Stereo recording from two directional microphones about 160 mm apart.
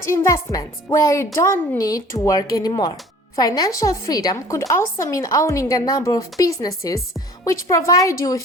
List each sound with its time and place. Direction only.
0.0 s a woman's voice: 20° left (ahead or behind)